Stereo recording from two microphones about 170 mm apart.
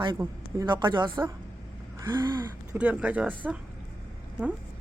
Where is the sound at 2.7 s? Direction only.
10° right (ahead or behind).